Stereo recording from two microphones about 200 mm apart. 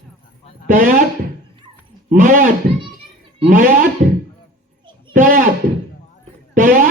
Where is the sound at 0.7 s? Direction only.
40° right (ahead or behind).